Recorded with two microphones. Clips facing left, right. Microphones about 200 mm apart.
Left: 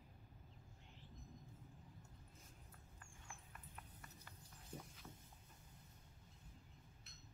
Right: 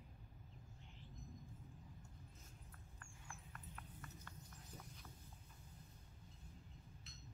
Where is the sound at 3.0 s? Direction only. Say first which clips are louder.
Right 1 dB; 10° left (ahead or behind).